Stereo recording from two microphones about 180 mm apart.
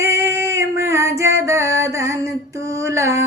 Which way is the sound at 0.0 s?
15° right (ahead or behind).